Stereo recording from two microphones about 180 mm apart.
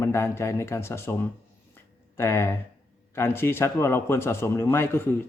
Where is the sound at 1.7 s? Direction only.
15° left (ahead or behind).